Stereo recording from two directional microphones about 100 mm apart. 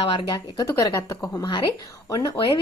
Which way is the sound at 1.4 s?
50° left (ahead or behind).